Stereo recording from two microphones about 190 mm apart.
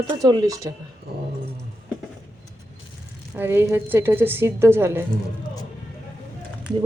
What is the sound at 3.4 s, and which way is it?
Speech, 10° right (ahead or behind).